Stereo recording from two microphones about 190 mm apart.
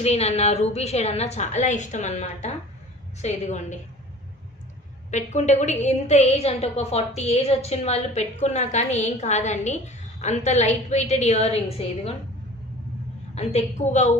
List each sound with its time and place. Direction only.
0.0 s a woman's voice: 35° left (ahead or behind)
5.1 s a woman's voice: 40° left (ahead or behind)
13.3 s a woman's voice: 35° left (ahead or behind)